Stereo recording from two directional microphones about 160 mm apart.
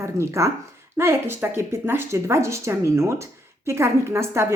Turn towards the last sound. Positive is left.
turn(degrees=-15)  # may be behind; listen again after turning